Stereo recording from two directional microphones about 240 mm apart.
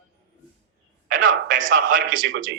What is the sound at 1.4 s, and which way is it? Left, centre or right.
Speech, right.